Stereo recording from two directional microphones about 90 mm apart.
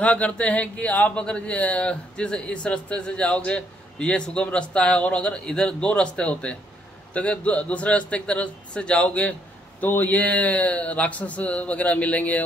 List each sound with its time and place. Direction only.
0.0 s speech: 15° left (ahead or behind)